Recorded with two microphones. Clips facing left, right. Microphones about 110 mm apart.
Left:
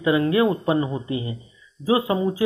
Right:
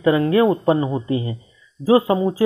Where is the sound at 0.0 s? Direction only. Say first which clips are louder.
Right 3 dB; 35° right (ahead or behind).